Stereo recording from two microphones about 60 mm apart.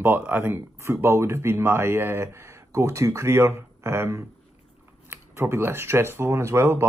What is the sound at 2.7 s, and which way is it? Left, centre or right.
Speech, right.